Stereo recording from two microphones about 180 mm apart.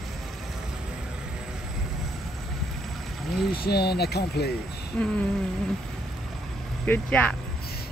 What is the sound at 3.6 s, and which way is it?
Speech, 65° left (ahead or behind).